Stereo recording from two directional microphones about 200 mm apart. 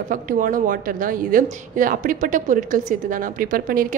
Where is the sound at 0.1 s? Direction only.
45° right (ahead or behind).